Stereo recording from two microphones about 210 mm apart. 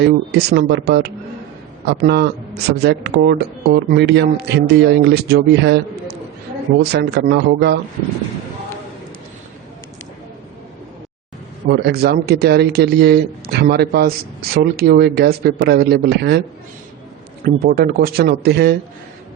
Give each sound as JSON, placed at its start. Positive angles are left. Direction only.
{"t": 0.0, "sound": "speech", "side_deg": -50}
{"t": 11.7, "sound": "speech", "side_deg": -50}
{"t": 17.4, "sound": "speech", "side_deg": -45}